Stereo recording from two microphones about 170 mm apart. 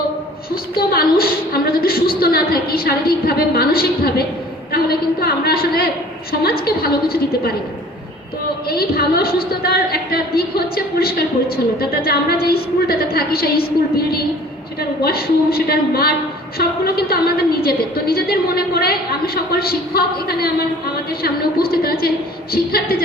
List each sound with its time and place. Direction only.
0.5 s a woman's voice: 65° left (ahead or behind)
8.6 s a woman's voice: 65° left (ahead or behind)